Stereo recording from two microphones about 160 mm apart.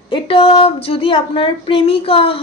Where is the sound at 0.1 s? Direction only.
35° left (ahead or behind).